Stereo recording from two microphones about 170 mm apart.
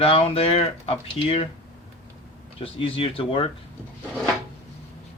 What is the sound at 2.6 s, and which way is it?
Speech, 30° left (ahead or behind).